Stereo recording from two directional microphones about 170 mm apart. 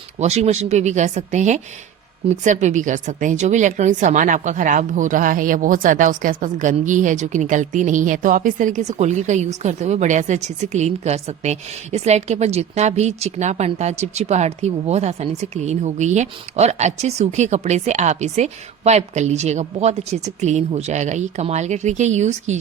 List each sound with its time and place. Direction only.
0.2 s a woman's voice: 40° right (ahead or behind)